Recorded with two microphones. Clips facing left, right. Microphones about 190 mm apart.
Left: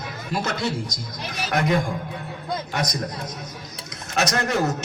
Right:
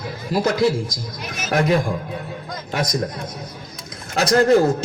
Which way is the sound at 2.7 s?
25° right (ahead or behind).